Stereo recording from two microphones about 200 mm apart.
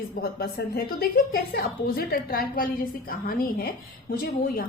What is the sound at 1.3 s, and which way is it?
A woman's voice, 50° left (ahead or behind).